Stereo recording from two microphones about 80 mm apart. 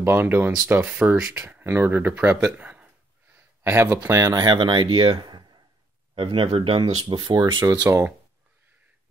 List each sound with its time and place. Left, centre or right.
0.0 s speech: right
0.8 s speech: centre
1.5 s speech: right
4.4 s speech: right
6.1 s speech: right
7.9 s speech: right